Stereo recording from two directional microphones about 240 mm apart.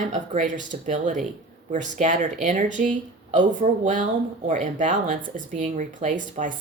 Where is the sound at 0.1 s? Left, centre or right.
Right.